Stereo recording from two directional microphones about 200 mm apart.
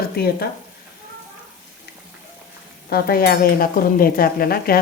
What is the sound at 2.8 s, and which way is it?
A woman's voice, 50° left (ahead or behind).